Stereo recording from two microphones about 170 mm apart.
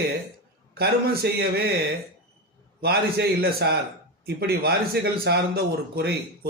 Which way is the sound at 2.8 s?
65° right (ahead or behind).